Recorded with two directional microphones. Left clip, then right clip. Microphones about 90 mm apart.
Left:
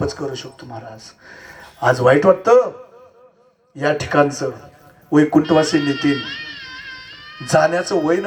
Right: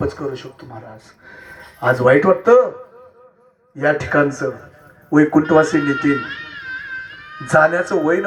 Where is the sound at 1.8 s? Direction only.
45° left (ahead or behind).